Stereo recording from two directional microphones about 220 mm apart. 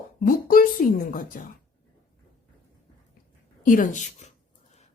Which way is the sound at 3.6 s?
35° left (ahead or behind).